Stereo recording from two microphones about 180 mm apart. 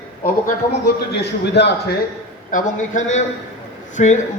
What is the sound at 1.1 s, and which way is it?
Speech, 70° left (ahead or behind).